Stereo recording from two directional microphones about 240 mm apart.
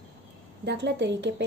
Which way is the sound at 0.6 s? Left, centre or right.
Right.